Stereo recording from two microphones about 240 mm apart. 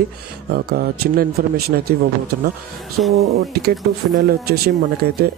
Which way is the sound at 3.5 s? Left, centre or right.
Right.